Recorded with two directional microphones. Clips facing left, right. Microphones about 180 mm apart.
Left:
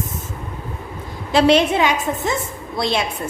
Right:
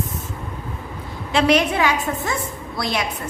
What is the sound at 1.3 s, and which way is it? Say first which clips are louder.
A woman's voice: left 3 dB; 30° left (ahead or behind).